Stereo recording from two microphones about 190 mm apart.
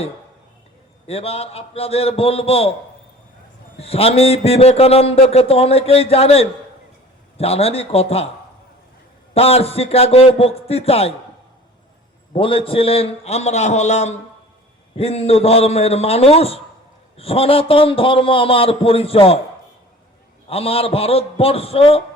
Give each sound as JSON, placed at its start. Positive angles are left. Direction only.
{"t": 1.0, "sound": "a man's voice", "side_deg": 30}
{"t": 3.8, "sound": "a man's voice", "side_deg": 30}
{"t": 9.3, "sound": "a man's voice", "side_deg": 35}
{"t": 12.3, "sound": "a man's voice", "side_deg": 30}
{"t": 20.5, "sound": "a man's voice", "side_deg": 30}